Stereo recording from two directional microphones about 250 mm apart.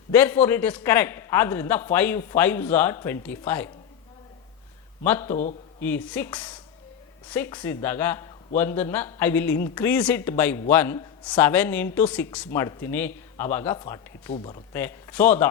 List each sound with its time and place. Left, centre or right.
0.1 s a man's voice: centre
5.0 s a man's voice: centre
14.7 s a man's voice: centre